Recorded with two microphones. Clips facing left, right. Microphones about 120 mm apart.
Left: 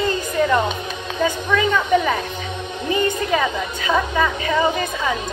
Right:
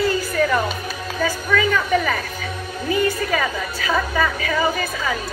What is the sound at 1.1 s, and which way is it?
A woman's voice, 25° left (ahead or behind).